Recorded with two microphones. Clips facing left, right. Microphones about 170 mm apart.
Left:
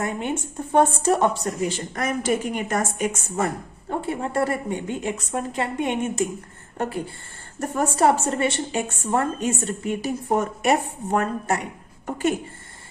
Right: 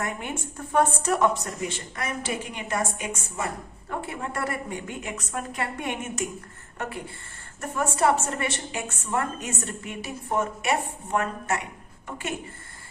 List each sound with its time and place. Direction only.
0.0 s a woman's voice: 25° left (ahead or behind); by 3.4 s 45° left (ahead or behind)
3.8 s a woman's voice: 30° left (ahead or behind)
7.6 s a woman's voice: 35° left (ahead or behind)